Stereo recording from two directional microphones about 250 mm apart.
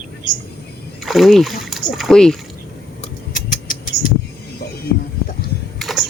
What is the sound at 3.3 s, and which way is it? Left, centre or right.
Rodents, left.